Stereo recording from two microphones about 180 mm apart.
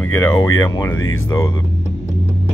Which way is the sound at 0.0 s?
15° left (ahead or behind).